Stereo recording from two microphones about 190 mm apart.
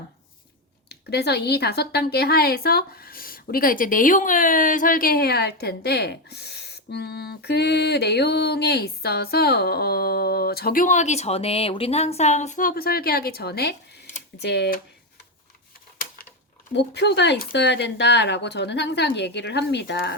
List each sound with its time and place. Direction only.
0.9 s speech: 60° left (ahead or behind)
16.7 s speech: 65° left (ahead or behind)